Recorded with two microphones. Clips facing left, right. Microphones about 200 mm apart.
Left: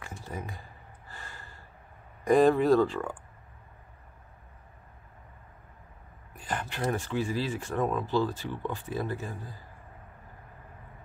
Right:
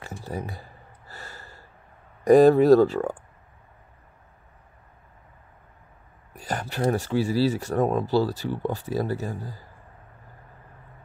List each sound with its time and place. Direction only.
0.0 s gasp: 35° right (ahead or behind)
2.2 s speech: 40° right (ahead or behind)
6.3 s speech: 40° right (ahead or behind)